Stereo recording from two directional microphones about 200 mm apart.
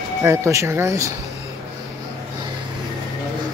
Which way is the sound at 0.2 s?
15° right (ahead or behind).